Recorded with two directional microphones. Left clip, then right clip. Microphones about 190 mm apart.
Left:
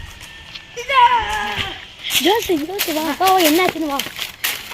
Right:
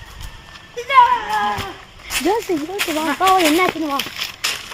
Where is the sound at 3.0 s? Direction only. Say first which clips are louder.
Even; 30° left (ahead or behind).